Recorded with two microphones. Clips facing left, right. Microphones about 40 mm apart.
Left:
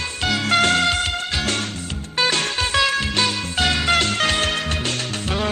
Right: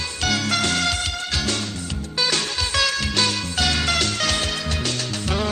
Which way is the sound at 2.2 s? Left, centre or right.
Left.